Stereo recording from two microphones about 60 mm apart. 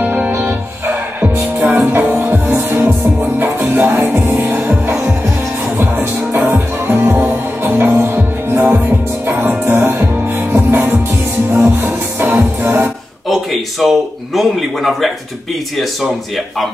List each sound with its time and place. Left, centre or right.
0.0 s music: right
1.6 s music: right
13.3 s a man's voice: centre